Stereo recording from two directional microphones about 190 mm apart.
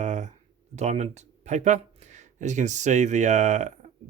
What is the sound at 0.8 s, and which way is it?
Speech, 35° right (ahead or behind).